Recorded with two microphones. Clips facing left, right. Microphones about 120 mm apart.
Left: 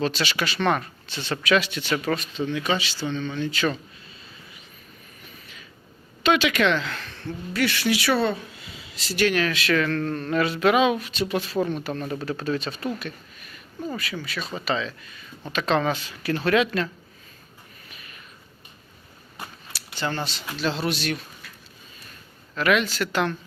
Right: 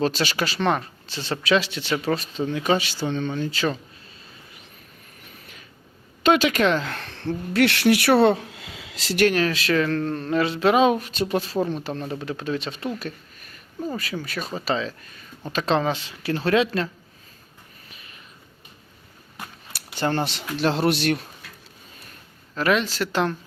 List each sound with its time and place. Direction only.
0.0 s speech: 40° right (ahead or behind)
6.2 s speech: 40° right (ahead or behind)
7.1 s speech: 75° right (ahead or behind); by 9.2 s 90° right
9.2 s speech: 35° right (ahead or behind)
12.2 s speech: 15° right (ahead or behind)
13.0 s a sound: 40° right (ahead or behind)
13.9 s speech: 35° right (ahead or behind)
15.5 s speech: 30° right (ahead or behind)
17.8 s a sound: 25° right (ahead or behind)
19.7 s a sound: 55° right (ahead or behind)
20.2 s speech: 60° right (ahead or behind)
22.5 s speech: 30° right (ahead or behind)